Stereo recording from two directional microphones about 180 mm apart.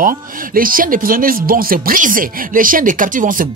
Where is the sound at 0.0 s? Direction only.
50° right (ahead or behind).